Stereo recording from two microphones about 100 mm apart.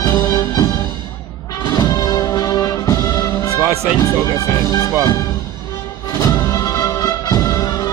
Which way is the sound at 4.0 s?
35° left (ahead or behind).